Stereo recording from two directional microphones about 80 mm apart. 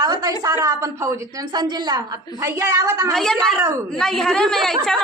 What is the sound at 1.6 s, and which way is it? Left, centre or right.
Speech, right.